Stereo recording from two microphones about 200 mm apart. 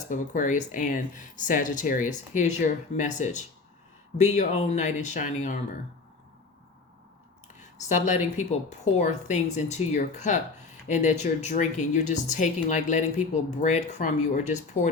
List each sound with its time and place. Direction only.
0.1 s speech: 40° left (ahead or behind)
7.6 s speech: 35° left (ahead or behind)